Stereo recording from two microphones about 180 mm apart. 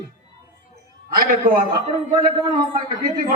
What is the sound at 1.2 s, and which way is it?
Speech, 50° right (ahead or behind).